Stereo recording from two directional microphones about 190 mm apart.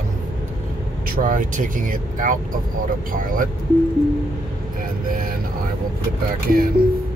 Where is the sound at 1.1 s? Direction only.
45° right (ahead or behind).